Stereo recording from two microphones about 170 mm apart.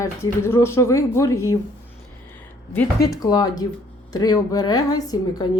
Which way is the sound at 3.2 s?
25° left (ahead or behind).